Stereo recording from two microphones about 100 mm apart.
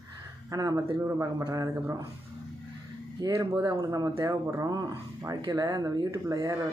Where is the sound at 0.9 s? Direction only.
20° right (ahead or behind).